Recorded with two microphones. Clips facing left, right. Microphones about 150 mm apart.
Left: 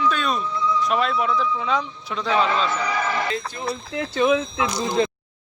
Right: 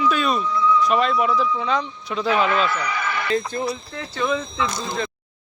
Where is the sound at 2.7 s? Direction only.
30° left (ahead or behind).